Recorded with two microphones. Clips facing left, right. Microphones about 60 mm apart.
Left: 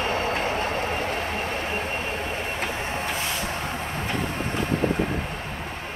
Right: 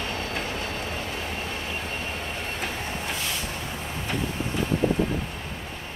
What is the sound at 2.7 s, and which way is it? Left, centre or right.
Vehicle, left.